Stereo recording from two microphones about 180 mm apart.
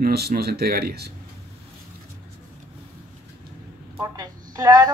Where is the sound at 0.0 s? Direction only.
60° right (ahead or behind).